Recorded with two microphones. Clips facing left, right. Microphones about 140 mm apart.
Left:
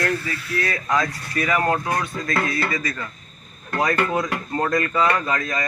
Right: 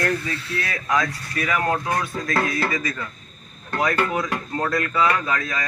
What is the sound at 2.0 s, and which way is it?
Speech, 5° right (ahead or behind).